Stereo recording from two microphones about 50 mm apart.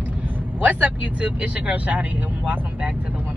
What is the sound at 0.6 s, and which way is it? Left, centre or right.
Speech, right.